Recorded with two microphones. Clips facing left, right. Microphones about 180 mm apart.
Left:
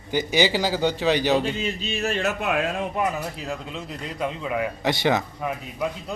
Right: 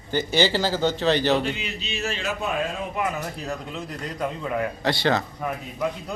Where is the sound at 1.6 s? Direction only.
45° left (ahead or behind); by 2.6 s 75° left (ahead or behind).